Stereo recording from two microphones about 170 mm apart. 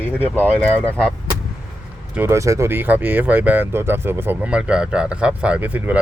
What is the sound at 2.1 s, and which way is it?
Speech, 15° right (ahead or behind).